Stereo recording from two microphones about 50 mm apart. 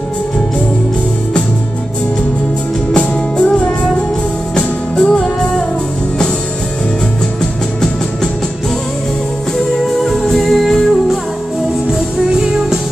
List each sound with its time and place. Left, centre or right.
2.9 s music: centre
9.8 s music: centre
11.9 s music: centre